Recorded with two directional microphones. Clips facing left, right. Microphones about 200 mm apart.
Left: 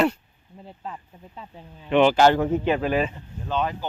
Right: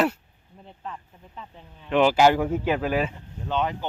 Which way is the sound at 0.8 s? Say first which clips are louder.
Even; 20° left (ahead or behind).